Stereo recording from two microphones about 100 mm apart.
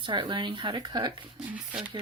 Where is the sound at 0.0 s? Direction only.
55° right (ahead or behind).